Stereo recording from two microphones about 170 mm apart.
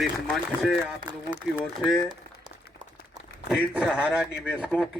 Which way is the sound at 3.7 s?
5° right (ahead or behind).